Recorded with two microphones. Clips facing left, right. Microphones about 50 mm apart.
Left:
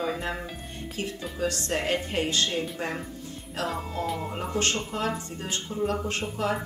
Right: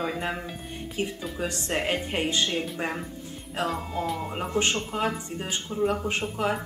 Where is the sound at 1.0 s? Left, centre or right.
Right.